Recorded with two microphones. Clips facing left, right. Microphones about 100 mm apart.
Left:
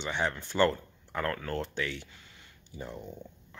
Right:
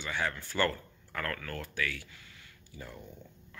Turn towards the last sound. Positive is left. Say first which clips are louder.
# left 5 dB
turn(degrees=20)  # may be behind; listen again after turning